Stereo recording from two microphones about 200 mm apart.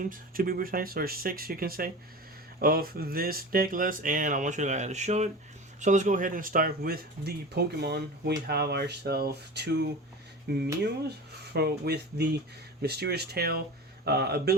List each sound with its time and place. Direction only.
0.1 s speech: 45° right (ahead or behind)